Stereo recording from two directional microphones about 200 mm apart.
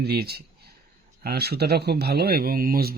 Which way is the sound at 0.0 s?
50° right (ahead or behind).